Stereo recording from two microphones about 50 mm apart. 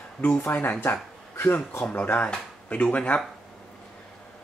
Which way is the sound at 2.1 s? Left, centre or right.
Left.